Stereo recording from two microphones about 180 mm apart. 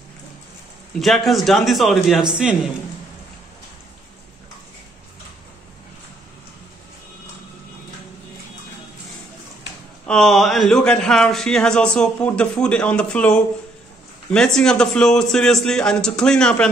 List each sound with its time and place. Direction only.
1.0 s speech: centre (ahead or behind)
10.0 s speech: 5° left (ahead or behind)